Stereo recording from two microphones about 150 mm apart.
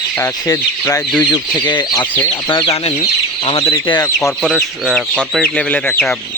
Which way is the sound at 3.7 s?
25° left (ahead or behind).